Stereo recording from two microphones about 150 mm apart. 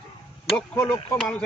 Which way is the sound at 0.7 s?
15° left (ahead or behind).